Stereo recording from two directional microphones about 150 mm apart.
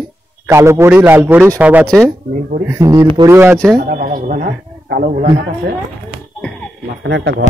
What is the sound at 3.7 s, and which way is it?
A man's voice, 55° right (ahead or behind).